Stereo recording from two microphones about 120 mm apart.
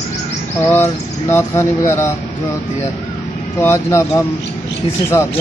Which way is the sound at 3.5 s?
25° left (ahead or behind).